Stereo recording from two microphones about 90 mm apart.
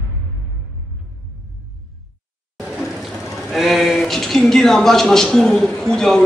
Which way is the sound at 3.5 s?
Centre (ahead or behind).